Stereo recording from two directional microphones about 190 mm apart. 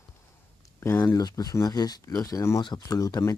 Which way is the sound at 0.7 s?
10° left (ahead or behind).